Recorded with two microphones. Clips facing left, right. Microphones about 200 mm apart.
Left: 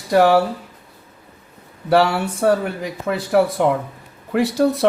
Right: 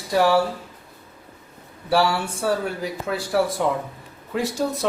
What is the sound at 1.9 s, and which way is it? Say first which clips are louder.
Speech: left 4 dB; 60° left (ahead or behind).